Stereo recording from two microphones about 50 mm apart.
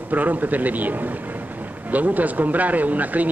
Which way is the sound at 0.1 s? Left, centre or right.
Right.